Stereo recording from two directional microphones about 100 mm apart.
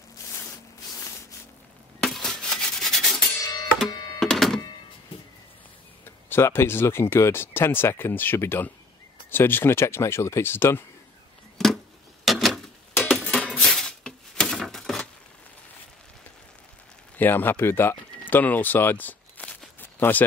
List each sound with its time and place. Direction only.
2.0 s rub: centre (ahead or behind)
3.3 s music: 40° left (ahead or behind)
4.2 s music: 5° left (ahead or behind)
6.0 s speech: 25° left (ahead or behind)
11.5 s a sound: 5° left (ahead or behind)
17.2 s speech: 20° left (ahead or behind)
19.8 s a sound: 20° left (ahead or behind)